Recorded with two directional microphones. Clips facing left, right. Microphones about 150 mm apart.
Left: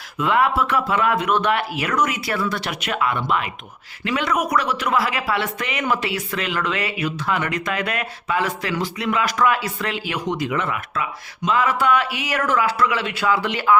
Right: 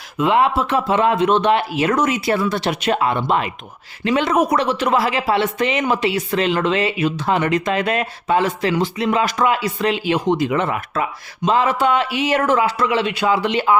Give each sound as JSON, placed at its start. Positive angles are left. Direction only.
{"t": 0.2, "sound": "speech", "side_deg": -20}